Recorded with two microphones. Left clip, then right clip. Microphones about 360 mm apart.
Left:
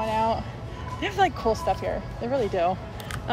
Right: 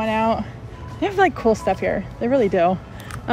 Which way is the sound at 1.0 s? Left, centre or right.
Centre.